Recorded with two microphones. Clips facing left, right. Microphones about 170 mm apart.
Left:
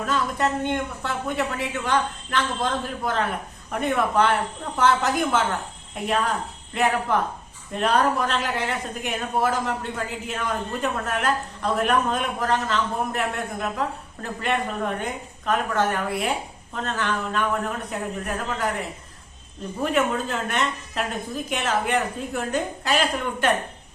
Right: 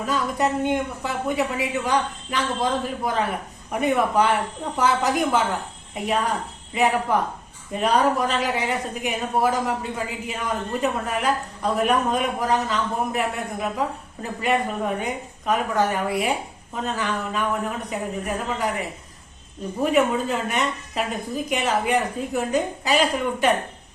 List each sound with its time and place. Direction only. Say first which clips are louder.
0.0 s speech: right 1 dB; 5° right (ahead or behind)
6.7 s speech: right 1 dB; centre (ahead or behind)
19.8 s speech: right 3 dB; 5° right (ahead or behind)